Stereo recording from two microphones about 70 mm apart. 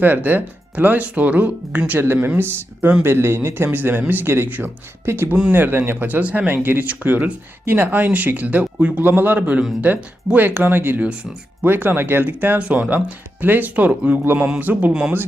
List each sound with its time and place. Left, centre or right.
0.0 s speech: right